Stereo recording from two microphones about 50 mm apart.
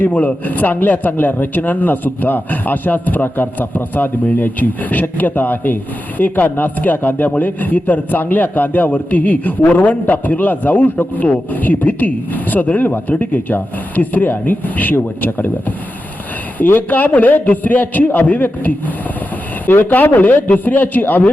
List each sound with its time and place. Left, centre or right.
0.0 s speech: left
16.6 s speech: left